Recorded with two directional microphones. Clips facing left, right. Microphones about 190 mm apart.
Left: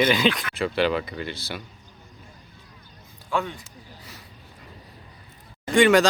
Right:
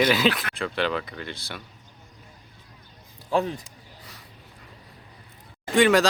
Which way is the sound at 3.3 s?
35° right (ahead or behind).